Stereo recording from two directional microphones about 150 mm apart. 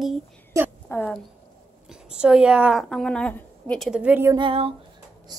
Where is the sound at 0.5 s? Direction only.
20° right (ahead or behind).